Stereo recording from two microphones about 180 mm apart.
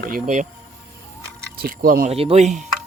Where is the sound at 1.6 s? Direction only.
55° right (ahead or behind).